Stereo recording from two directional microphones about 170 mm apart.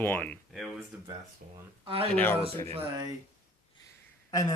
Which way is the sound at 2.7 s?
35° right (ahead or behind).